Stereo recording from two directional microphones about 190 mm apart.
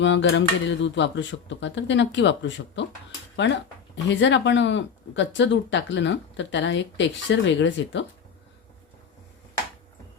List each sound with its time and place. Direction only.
0.0 s speech: 70° left (ahead or behind)